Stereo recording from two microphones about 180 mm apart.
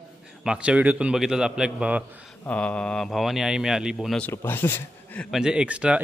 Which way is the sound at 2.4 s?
5° left (ahead or behind).